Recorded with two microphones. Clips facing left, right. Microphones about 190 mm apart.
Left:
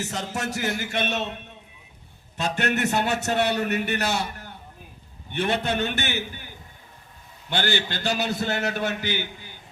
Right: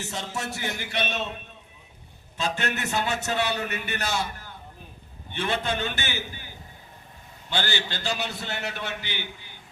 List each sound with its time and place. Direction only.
0.0 s a man's voice: 40° left (ahead or behind)
2.4 s a man's voice: 60° left (ahead or behind)
7.5 s a man's voice: 55° left (ahead or behind)